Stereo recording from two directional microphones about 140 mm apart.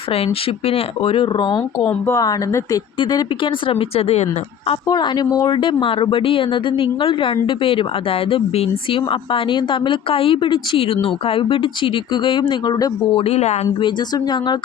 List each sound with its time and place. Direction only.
0.7 s speech: 40° left (ahead or behind)
1.8 s speech: 10° left (ahead or behind)
2.1 s speech: 25° left (ahead or behind)
3.7 s speech: 45° left (ahead or behind)
4.9 s speech: 30° left (ahead or behind); by 13.6 s 50° left (ahead or behind)
13.8 s speech: 30° left (ahead or behind)